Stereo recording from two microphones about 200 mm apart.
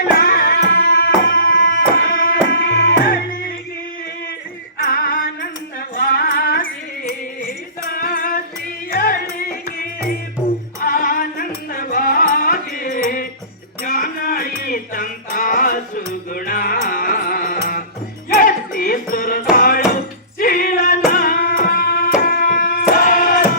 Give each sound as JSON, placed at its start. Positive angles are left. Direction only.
{"t": 0.2, "sound": "music", "side_deg": 50}
{"t": 4.8, "sound": "music", "side_deg": 45}
{"t": 20.4, "sound": "singing", "side_deg": 45}
{"t": 21.1, "sound": "music", "side_deg": 45}